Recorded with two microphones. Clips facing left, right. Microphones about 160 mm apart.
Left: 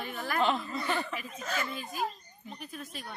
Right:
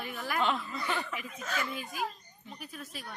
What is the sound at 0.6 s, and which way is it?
Speech, 25° left (ahead or behind).